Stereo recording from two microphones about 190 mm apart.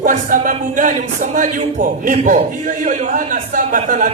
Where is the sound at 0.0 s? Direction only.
45° right (ahead or behind).